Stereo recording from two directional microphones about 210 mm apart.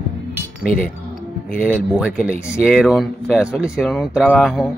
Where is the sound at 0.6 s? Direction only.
40° left (ahead or behind).